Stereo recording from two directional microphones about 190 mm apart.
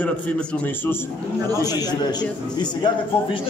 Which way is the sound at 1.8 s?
20° left (ahead or behind).